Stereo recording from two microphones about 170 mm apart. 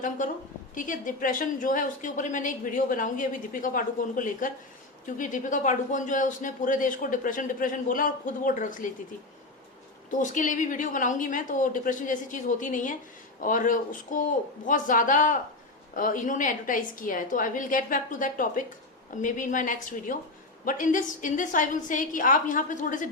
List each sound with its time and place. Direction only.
0.7 s a woman's voice: 50° left (ahead or behind)
10.1 s a woman's voice: 50° left (ahead or behind)